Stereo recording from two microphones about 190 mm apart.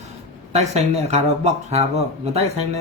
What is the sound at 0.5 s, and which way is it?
Speech, 35° right (ahead or behind).